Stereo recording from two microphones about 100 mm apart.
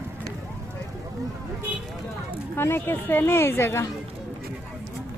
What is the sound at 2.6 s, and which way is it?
Speech, 25° left (ahead or behind).